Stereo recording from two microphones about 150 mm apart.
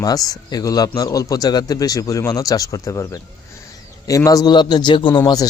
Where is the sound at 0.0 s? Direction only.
25° left (ahead or behind).